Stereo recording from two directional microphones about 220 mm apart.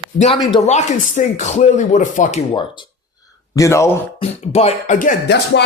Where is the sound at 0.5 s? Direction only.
30° left (ahead or behind).